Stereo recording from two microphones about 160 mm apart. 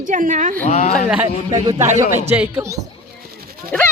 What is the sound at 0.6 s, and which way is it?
Speech, 45° left (ahead or behind).